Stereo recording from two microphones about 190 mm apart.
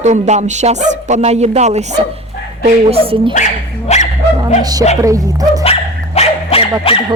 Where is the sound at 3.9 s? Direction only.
35° left (ahead or behind).